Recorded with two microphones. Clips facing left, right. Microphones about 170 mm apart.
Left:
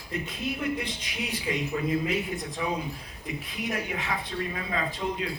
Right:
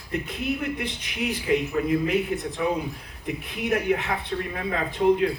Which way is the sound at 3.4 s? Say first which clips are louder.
Right 10 dB; 60° right (ahead or behind).